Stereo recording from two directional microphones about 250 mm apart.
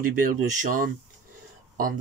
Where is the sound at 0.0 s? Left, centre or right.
Right.